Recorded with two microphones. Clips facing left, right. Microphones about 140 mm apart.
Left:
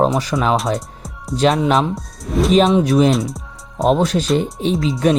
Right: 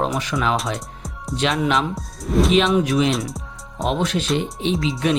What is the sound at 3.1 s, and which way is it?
Music, centre (ahead or behind).